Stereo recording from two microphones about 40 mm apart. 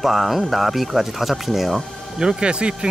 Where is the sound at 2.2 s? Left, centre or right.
Right.